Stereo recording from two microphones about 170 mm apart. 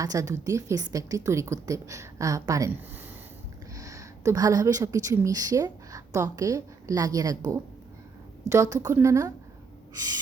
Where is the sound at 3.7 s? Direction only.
20° right (ahead or behind).